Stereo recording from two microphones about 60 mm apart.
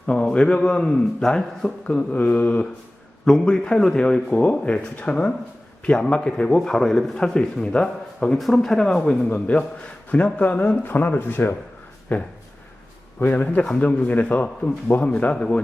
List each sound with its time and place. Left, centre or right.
0.0 s a man's voice: centre
1.9 s a man's voice: left
3.4 s a man's voice: centre
8.4 s a man's voice: centre
9.3 s a man's voice: left